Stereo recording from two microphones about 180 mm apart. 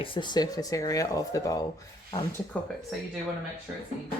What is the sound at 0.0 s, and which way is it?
Speech, 25° left (ahead or behind).